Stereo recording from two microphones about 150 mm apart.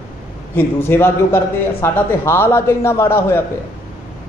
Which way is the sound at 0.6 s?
15° left (ahead or behind).